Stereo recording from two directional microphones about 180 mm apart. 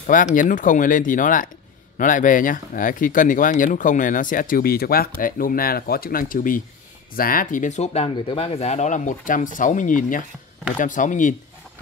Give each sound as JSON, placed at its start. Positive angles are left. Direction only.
{"t": 0.0, "sound": "speech", "side_deg": 50}